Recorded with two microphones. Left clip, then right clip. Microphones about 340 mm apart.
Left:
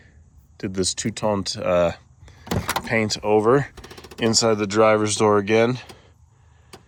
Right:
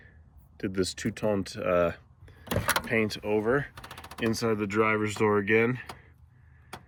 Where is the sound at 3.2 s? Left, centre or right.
Left.